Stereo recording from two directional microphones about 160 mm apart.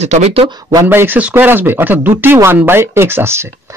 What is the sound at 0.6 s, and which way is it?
Speech, 20° right (ahead or behind).